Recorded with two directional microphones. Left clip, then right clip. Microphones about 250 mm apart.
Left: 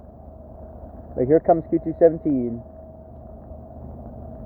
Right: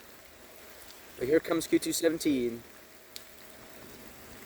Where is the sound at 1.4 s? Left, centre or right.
Right.